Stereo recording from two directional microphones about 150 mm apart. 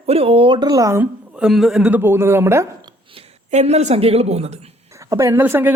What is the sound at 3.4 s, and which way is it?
A woman's voice, 45° right (ahead or behind).